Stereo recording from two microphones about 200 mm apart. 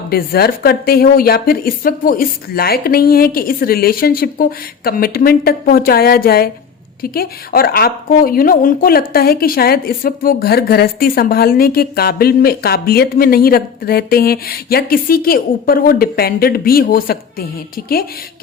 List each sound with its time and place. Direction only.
0.1 s speech: 50° left (ahead or behind)